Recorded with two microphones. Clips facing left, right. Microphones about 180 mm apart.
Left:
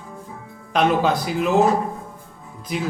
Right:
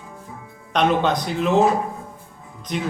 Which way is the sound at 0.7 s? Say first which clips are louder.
Even; 5° left (ahead or behind).